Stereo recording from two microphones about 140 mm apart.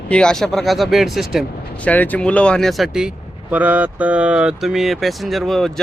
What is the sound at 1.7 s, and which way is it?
Speech, 10° left (ahead or behind).